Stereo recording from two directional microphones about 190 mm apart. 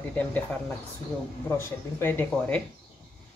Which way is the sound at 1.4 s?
10° left (ahead or behind).